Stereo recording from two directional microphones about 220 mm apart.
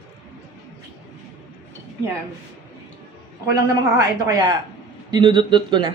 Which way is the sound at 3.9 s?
15° right (ahead or behind).